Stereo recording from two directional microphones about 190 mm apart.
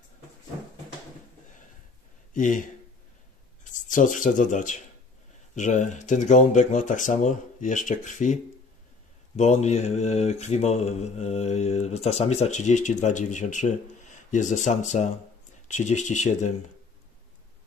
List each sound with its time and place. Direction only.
2.3 s speech: 45° left (ahead or behind)
5.5 s mantra: 40° left (ahead or behind)
9.4 s mantra: 35° left (ahead or behind)